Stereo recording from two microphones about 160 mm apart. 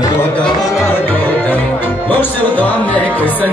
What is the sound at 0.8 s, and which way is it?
Music, 15° left (ahead or behind).